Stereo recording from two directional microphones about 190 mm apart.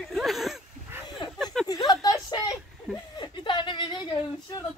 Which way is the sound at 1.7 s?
20° left (ahead or behind).